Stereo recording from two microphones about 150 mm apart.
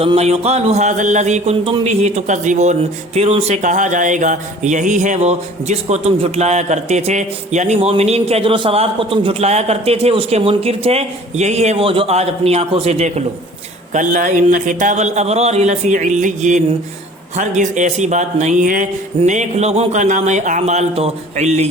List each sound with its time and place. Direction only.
0.0 s speech: 45° right (ahead or behind)
13.9 s speech: 55° right (ahead or behind)